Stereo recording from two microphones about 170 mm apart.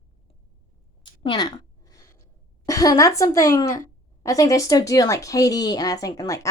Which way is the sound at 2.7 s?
20° left (ahead or behind).